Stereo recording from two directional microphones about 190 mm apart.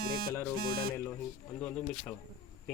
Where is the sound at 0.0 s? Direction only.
55° right (ahead or behind).